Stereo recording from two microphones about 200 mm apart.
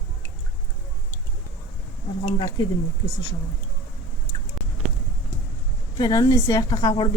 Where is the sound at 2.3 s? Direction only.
20° left (ahead or behind).